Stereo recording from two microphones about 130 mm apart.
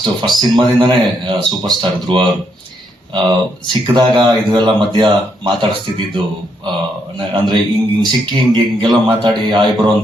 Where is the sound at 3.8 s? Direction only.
40° right (ahead or behind).